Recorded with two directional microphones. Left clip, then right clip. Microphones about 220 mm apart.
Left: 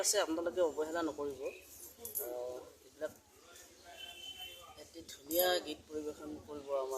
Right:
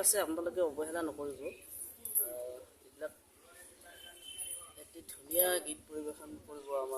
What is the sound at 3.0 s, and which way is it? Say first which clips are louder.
Speech: left 1 dB; centre (ahead or behind).